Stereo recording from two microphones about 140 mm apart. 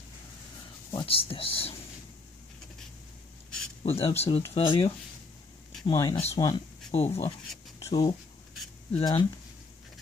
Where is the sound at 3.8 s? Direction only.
45° left (ahead or behind).